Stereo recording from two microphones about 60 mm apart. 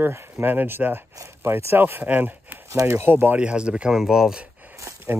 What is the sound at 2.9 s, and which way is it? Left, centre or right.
Speech, right.